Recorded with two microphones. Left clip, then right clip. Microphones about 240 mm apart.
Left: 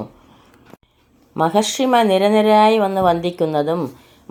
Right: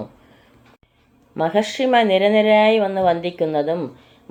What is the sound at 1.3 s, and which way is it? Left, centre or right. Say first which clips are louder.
Speech: left 2 dB; left.